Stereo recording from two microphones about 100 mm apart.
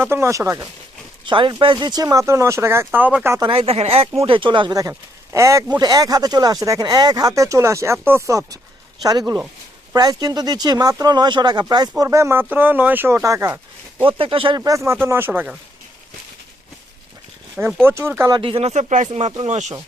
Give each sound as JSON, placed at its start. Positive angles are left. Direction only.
{"t": 0.0, "sound": "speech", "side_deg": -25}
{"t": 1.2, "sound": "speech", "side_deg": -55}
{"t": 3.5, "sound": "speech", "side_deg": -75}
{"t": 4.2, "sound": "speech", "side_deg": -60}
{"t": 4.7, "sound": "speech", "side_deg": -35}
{"t": 12.0, "sound": "speech", "side_deg": -25}
{"t": 14.2, "sound": "speech", "side_deg": -65}
{"t": 14.6, "sound": "speech", "side_deg": -35}
{"t": 15.0, "sound": "speech", "side_deg": -20}
{"t": 17.8, "sound": "speech", "side_deg": -25}
{"t": 18.3, "sound": "speech", "side_deg": -65}
{"t": 19.1, "sound": "speech", "side_deg": -90}